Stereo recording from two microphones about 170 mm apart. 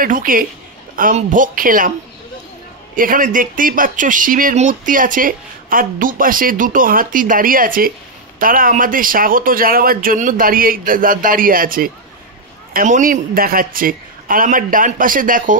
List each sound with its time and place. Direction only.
0.0 s a man's voice: 55° right (ahead or behind)
3.0 s a man's voice: 55° right (ahead or behind)